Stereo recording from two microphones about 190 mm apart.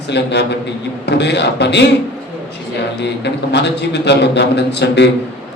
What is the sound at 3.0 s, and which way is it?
A man's voice, 65° left (ahead or behind).